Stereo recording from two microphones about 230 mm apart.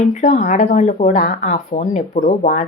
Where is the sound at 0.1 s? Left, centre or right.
Left.